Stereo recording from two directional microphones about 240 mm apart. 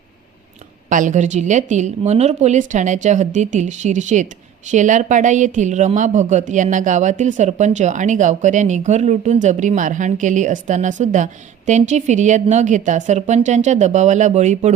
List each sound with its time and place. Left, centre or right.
0.9 s a woman's voice: right